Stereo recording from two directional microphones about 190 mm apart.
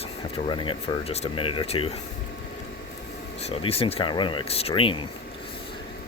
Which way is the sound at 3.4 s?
30° left (ahead or behind).